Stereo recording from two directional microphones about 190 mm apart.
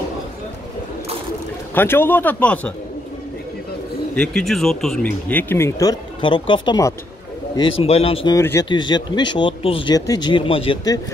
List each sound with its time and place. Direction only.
1.8 s speech: 10° left (ahead or behind)
4.1 s speech: 5° left (ahead or behind); by 8.4 s 30° left (ahead or behind)
8.4 s speech: 15° left (ahead or behind)